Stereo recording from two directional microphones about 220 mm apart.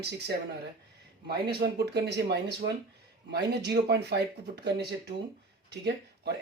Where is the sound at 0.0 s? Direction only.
50° right (ahead or behind).